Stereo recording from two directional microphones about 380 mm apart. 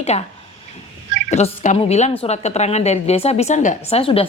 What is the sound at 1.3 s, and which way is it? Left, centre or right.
A woman's voice, centre.